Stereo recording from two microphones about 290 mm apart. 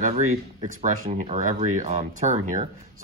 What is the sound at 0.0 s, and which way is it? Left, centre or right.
Speech, right.